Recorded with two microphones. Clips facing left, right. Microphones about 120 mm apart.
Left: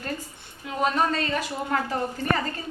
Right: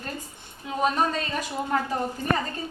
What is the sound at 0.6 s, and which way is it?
Speech, 15° right (ahead or behind).